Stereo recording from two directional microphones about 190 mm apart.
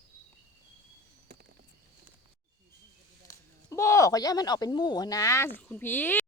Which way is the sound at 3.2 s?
15° left (ahead or behind).